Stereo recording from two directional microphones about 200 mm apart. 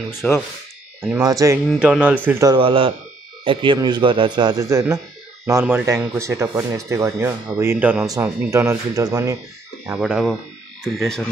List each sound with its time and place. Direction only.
0.1 s speech: 10° left (ahead or behind)
1.1 s speech: 15° right (ahead or behind)
1.7 s speech: 5° right (ahead or behind)
9.9 s speech: centre (ahead or behind)